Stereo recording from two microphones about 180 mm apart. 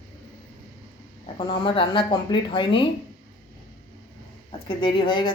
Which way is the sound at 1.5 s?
30° left (ahead or behind).